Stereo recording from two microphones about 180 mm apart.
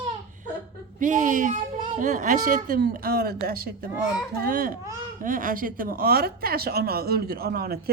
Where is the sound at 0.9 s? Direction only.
45° right (ahead or behind).